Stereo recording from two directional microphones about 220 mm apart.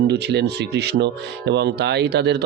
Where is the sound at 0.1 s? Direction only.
50° right (ahead or behind).